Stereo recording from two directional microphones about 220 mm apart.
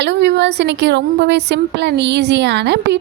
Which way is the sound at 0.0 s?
55° right (ahead or behind).